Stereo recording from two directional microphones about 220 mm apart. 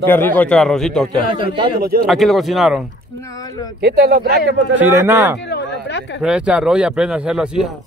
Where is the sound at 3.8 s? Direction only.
45° right (ahead or behind).